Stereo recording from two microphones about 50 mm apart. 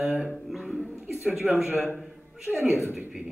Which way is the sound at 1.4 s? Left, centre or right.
Centre.